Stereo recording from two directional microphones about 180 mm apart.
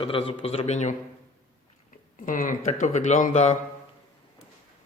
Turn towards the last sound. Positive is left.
turn(degrees=40)  # may be behind; listen again after turning